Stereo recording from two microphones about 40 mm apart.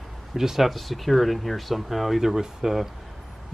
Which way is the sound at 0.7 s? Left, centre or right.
Centre.